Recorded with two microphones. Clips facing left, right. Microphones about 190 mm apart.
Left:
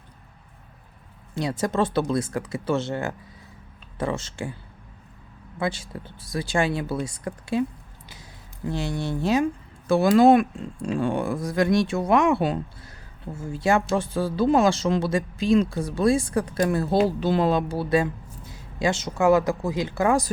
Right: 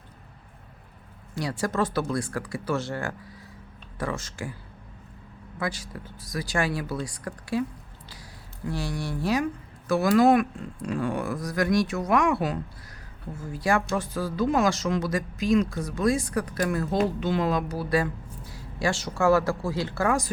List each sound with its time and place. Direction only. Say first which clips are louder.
1.4 s speech: left 3 dB; 20° left (ahead or behind)
5.5 s speech: left 4 dB; 25° left (ahead or behind)
8.6 s speech: left 3 dB; 20° left (ahead or behind)